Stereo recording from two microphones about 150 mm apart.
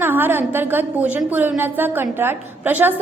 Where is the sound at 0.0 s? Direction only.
15° right (ahead or behind).